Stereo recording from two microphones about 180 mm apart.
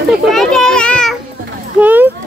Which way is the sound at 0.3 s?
Centre (ahead or behind).